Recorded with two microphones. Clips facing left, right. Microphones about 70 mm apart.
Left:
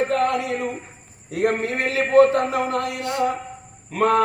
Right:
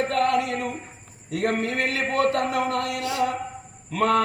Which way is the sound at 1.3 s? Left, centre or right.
Left.